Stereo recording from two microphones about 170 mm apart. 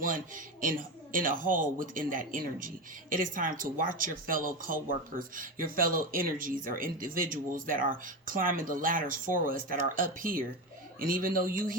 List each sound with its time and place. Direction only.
0.0 s speech: 55° right (ahead or behind)